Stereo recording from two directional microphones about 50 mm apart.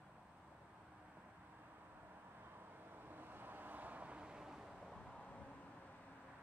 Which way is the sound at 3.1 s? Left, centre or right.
Right.